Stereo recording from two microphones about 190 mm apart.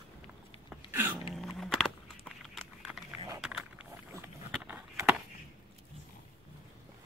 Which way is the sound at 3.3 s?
5° right (ahead or behind).